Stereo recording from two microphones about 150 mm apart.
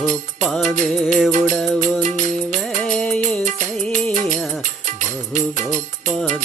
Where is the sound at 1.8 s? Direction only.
55° right (ahead or behind).